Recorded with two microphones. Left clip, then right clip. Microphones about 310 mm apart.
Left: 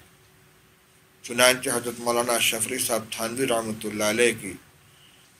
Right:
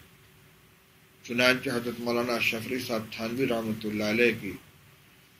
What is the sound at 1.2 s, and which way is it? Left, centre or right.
Speech, left.